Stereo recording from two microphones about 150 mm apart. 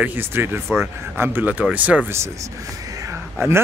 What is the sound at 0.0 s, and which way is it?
A man's voice, 15° right (ahead or behind).